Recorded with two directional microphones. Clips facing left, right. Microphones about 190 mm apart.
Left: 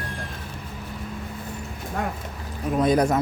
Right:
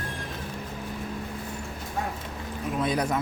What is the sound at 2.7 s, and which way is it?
Speech, 45° left (ahead or behind).